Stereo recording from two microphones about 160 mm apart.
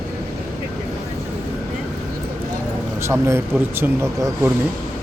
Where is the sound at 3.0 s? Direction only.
15° right (ahead or behind).